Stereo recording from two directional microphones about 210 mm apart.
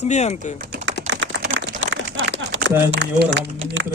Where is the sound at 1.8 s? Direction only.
60° right (ahead or behind).